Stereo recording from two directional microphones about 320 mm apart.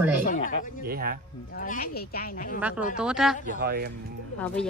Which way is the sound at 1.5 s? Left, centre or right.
Left.